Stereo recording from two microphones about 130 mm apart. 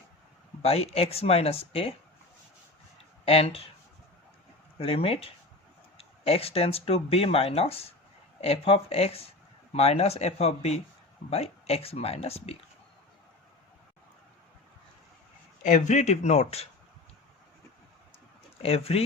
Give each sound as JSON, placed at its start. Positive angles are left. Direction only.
{"t": 0.6, "sound": "speech", "side_deg": 50}
{"t": 3.2, "sound": "speech", "side_deg": 50}
{"t": 4.8, "sound": "speech", "side_deg": 45}
{"t": 15.6, "sound": "speech", "side_deg": 65}
{"t": 18.6, "sound": "speech", "side_deg": 50}